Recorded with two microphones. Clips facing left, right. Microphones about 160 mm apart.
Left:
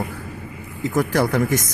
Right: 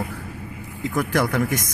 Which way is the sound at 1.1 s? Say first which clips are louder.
Left 1 dB; centre (ahead or behind).